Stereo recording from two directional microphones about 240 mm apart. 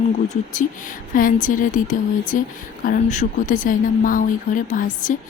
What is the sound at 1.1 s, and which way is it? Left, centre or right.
Speech, left.